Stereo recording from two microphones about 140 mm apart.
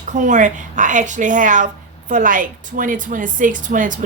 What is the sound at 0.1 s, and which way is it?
A woman's voice, 65° right (ahead or behind).